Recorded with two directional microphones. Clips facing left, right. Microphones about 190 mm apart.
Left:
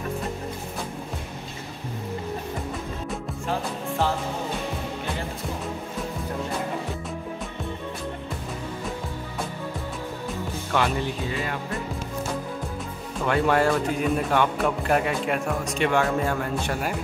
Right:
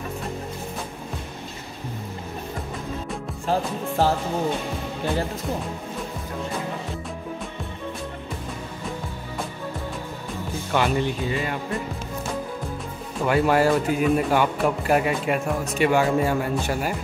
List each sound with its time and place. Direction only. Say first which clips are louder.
4.0 s music: right 4 dB; 35° right (ahead or behind)
10.7 s speech: right 3 dB; centre (ahead or behind)
13.2 s speech: right 2 dB; 5° right (ahead or behind)